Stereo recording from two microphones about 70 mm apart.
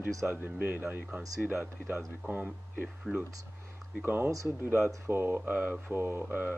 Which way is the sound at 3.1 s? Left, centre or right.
Centre.